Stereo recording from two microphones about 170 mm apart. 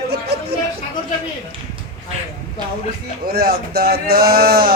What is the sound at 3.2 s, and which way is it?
Speech, 60° right (ahead or behind).